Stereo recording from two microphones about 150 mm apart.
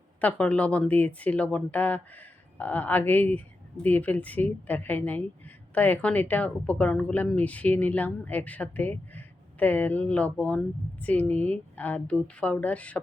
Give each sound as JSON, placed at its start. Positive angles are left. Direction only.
{"t": 0.2, "sound": "a woman's voice", "side_deg": 10}